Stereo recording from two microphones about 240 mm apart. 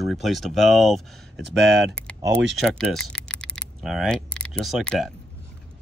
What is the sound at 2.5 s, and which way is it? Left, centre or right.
Speech, centre.